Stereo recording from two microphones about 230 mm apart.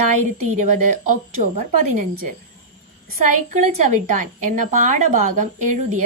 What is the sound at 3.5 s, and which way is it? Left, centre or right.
A woman's voice, right.